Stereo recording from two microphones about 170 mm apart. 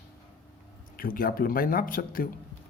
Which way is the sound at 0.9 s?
55° left (ahead or behind).